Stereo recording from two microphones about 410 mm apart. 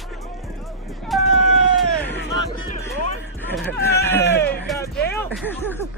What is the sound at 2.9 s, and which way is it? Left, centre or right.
Music, right.